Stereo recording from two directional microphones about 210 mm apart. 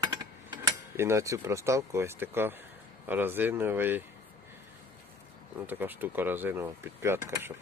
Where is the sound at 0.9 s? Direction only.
10° right (ahead or behind).